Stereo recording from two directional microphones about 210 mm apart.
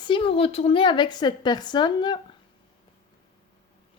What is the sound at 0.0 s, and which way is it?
Speech, 25° left (ahead or behind).